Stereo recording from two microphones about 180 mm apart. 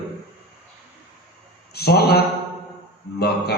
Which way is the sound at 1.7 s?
60° left (ahead or behind).